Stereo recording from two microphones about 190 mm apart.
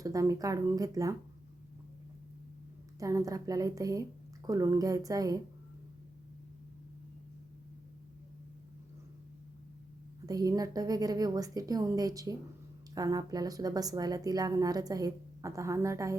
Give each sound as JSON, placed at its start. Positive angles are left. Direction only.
{"t": 0.0, "sound": "speech", "side_deg": -15}
{"t": 3.0, "sound": "a woman's voice", "side_deg": -15}
{"t": 10.2, "sound": "a woman's voice", "side_deg": -20}